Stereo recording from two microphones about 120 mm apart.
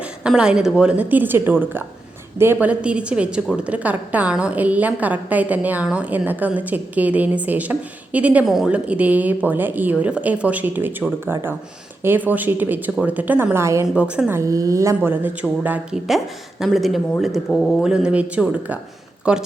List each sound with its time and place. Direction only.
0.3 s a woman's voice: 5° right (ahead or behind); by 13.8 s 25° right (ahead or behind)
13.8 s a woman's voice: 10° right (ahead or behind)
14.3 s a woman's voice: 25° right (ahead or behind)
15.1 s a woman's voice: 15° right (ahead or behind)
16.0 s a woman's voice: centre (ahead or behind)
17.8 s a woman's voice: 5° right (ahead or behind)